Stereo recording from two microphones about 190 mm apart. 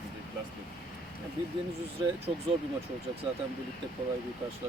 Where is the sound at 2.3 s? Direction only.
30° right (ahead or behind).